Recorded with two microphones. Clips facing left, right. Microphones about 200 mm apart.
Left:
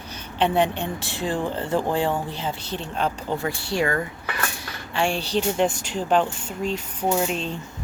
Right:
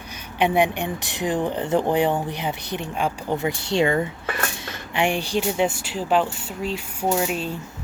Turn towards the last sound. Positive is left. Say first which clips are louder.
# even
turn(degrees=-5)  # may be behind; listen again after turning